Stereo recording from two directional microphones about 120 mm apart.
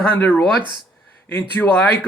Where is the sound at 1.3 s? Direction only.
15° left (ahead or behind).